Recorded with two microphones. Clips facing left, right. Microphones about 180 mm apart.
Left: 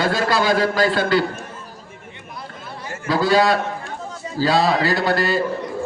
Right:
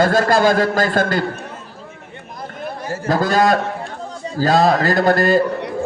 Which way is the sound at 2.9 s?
45° right (ahead or behind).